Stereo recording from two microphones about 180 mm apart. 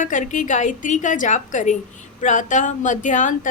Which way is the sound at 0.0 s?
45° left (ahead or behind).